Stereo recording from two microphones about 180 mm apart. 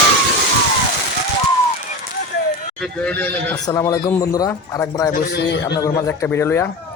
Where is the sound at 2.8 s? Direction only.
5° left (ahead or behind).